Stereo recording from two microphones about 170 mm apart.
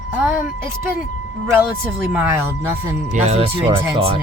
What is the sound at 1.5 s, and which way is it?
Speech, 10° right (ahead or behind).